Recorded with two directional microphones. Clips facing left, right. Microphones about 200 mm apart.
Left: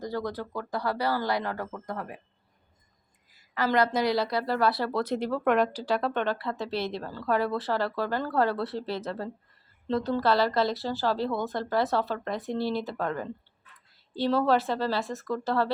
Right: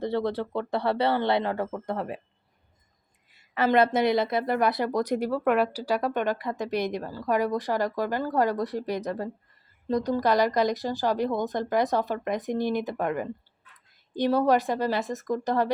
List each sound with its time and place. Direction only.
0.0 s speech: 25° right (ahead or behind)
3.3 s a woman's voice: 25° right (ahead or behind)